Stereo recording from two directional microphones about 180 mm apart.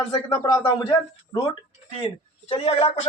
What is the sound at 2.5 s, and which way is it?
Speech, 35° left (ahead or behind).